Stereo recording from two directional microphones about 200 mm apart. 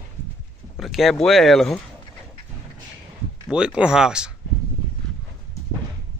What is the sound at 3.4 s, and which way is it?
Speech, 5° right (ahead or behind).